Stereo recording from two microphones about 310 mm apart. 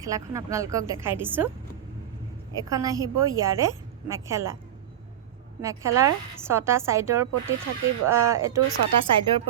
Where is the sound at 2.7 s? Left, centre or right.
Centre.